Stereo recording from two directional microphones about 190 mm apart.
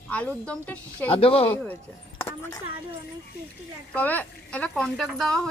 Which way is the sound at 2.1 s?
20° left (ahead or behind).